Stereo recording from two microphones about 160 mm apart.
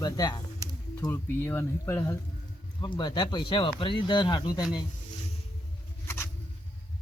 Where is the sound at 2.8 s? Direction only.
30° left (ahead or behind).